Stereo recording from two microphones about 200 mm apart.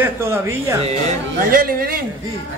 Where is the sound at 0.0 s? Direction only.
10° right (ahead or behind).